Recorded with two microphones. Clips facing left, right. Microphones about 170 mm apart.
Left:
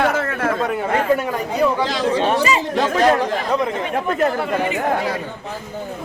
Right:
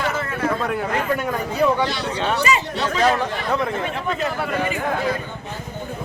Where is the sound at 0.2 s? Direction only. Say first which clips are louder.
Left 3 dB; 90° left.